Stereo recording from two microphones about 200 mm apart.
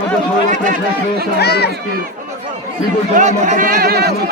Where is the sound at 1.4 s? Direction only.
55° left (ahead or behind).